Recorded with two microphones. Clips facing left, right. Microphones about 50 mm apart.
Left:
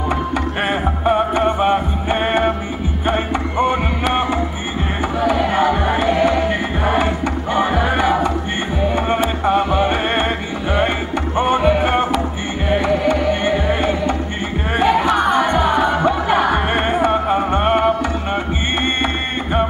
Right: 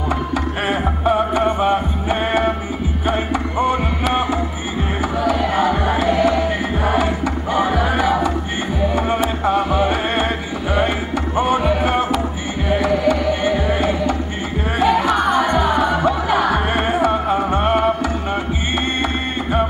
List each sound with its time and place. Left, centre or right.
1.0 s music: left
14.8 s crowd: left
15.3 s music: left